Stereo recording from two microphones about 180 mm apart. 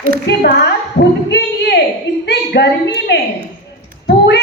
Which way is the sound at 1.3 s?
70° left (ahead or behind).